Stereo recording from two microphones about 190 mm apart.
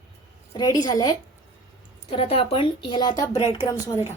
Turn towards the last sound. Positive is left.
turn(degrees=20)  # may be behind; listen again after turning